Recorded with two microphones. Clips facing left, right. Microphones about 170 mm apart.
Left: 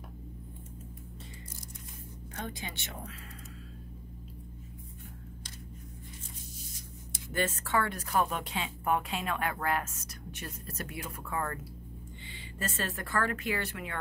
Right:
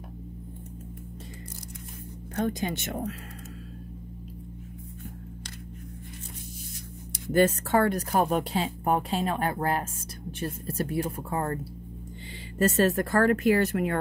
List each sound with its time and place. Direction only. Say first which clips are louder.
2.3 s speech: right 12 dB; 45° right (ahead or behind)
7.3 s speech: right 9 dB; 40° right (ahead or behind)